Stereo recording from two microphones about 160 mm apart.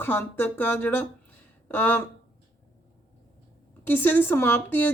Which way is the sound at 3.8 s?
10° left (ahead or behind).